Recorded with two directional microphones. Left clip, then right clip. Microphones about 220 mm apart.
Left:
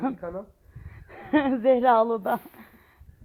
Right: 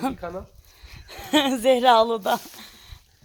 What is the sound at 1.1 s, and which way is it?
Speech, 15° right (ahead or behind).